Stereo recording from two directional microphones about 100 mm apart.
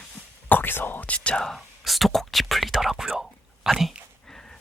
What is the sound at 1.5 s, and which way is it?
Whispering, centre (ahead or behind).